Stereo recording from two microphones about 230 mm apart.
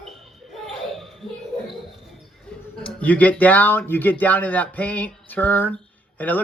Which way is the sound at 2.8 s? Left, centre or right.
Centre.